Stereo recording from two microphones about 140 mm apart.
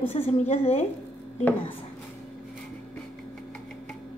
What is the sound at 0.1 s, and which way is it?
Speech, 50° left (ahead or behind).